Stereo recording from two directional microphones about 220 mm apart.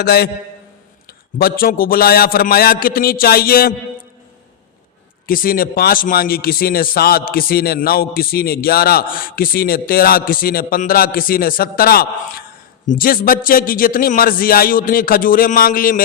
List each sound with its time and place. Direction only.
0.0 s a man's voice: 45° left (ahead or behind)
1.4 s a man's voice: 40° left (ahead or behind)
5.2 s a man's voice: 40° left (ahead or behind)